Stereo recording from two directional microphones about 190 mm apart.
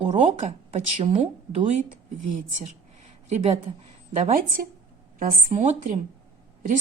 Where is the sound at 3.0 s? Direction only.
35° right (ahead or behind).